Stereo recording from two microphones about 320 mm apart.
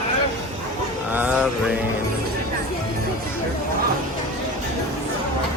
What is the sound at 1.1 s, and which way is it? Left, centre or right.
Music, centre.